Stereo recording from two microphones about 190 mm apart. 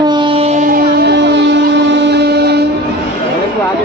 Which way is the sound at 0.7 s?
65° right (ahead or behind).